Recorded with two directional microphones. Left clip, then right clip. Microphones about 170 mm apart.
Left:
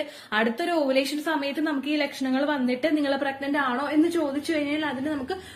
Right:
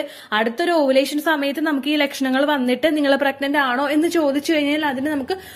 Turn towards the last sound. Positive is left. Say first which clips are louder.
# right 7 dB
turn(degrees=-40)  # may be behind; listen again after turning